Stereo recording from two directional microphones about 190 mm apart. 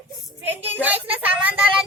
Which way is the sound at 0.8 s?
10° right (ahead or behind).